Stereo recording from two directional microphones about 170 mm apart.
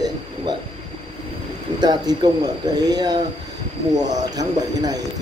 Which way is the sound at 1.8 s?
25° right (ahead or behind).